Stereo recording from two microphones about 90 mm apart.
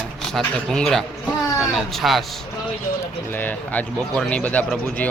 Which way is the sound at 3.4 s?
20° left (ahead or behind).